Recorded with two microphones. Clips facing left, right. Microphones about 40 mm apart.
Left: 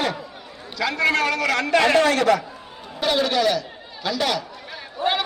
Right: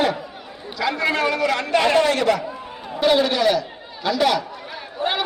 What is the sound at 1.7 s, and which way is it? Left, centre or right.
Speech, right.